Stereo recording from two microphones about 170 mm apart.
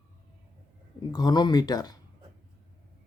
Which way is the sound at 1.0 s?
25° left (ahead or behind).